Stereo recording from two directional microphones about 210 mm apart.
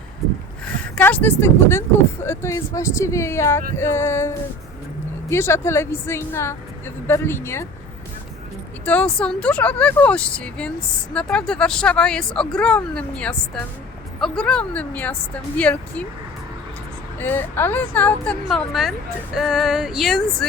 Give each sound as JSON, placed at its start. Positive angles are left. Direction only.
{"t": 0.9, "sound": "speech", "side_deg": 10}
{"t": 5.3, "sound": "speech", "side_deg": 10}
{"t": 8.8, "sound": "speech", "side_deg": 5}
{"t": 17.2, "sound": "speech", "side_deg": 10}